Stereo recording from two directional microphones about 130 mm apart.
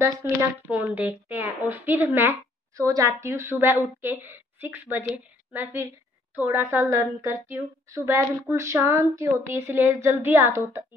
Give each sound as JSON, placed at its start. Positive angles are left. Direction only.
{"t": 0.0, "sound": "a woman's voice", "side_deg": -20}